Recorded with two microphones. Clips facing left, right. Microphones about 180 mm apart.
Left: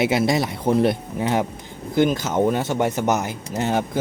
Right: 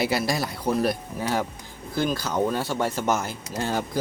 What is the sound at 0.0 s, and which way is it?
A man's voice, 20° left (ahead or behind).